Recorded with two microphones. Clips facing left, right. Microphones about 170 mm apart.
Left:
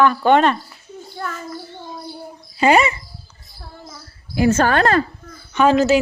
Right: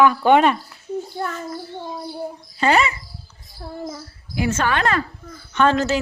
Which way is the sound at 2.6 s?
15° left (ahead or behind).